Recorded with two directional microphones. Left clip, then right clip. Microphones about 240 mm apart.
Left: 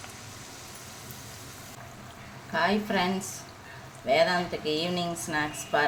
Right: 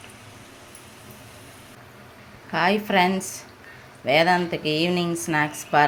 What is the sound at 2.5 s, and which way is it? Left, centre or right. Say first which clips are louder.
Speech: right 5 dB; right.